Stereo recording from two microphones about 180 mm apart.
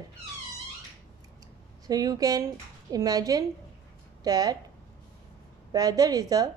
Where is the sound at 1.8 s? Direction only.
20° right (ahead or behind).